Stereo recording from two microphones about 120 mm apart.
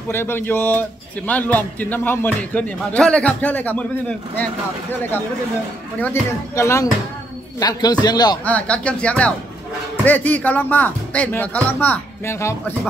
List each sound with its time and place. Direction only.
0.1 s a man's voice: 20° left (ahead or behind)
5.9 s a man's voice: 20° left (ahead or behind)
8.5 s a man's voice: 10° left (ahead or behind)